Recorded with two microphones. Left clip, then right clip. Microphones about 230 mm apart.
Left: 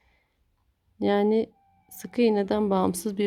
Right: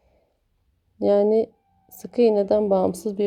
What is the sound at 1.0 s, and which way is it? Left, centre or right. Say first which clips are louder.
Speech: right 5 dB; centre.